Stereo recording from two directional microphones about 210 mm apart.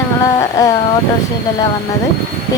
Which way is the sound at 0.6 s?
15° left (ahead or behind).